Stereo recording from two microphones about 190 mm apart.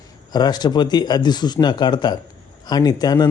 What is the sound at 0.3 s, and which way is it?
Speech, 20° left (ahead or behind).